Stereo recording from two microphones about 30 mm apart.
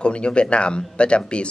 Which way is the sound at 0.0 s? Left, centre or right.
Left.